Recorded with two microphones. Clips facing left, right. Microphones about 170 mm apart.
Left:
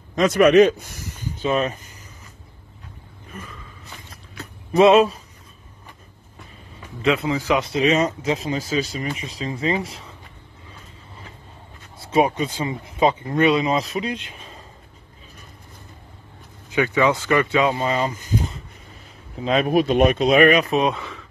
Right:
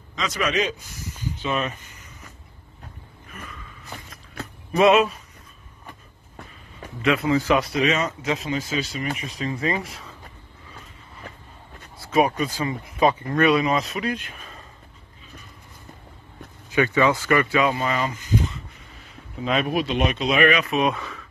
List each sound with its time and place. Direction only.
0.1 s a man's voice: 55° left (ahead or behind)
1.5 s speech: 35° left (ahead or behind)
4.7 s speech: 30° left (ahead or behind)
7.2 s speech: 15° left (ahead or behind)
7.6 s speech: 30° left (ahead or behind)
12.0 s speech: 25° left (ahead or behind)
16.7 s speech: 15° left (ahead or behind)
17.8 s speech: 35° left (ahead or behind)